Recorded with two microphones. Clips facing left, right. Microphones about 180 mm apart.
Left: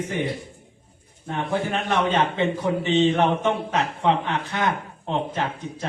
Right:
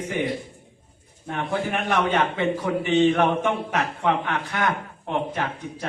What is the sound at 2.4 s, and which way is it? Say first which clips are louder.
A man's voice: left 1 dB; 20° left (ahead or behind).